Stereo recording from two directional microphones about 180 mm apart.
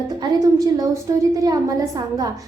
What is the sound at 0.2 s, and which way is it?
Speech, 25° right (ahead or behind).